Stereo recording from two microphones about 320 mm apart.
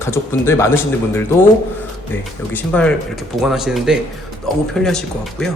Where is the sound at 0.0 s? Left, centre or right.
Centre.